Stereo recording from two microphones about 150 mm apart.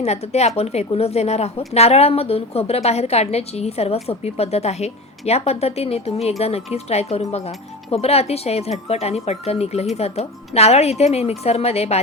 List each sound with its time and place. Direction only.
0.0 s a woman's voice: 45° left (ahead or behind)